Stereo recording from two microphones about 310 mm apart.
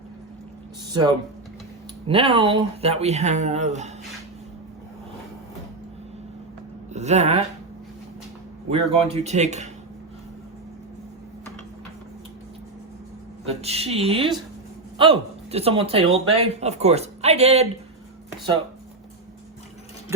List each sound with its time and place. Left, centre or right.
0.9 s speech: centre
6.9 s speech: right
8.7 s speech: centre
13.5 s speech: centre